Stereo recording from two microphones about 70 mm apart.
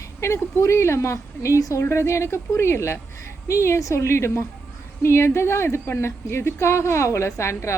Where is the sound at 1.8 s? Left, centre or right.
Left.